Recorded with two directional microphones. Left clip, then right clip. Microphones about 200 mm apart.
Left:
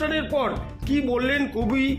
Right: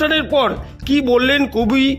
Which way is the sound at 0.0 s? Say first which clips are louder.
Right 9 dB; 55° right (ahead or behind).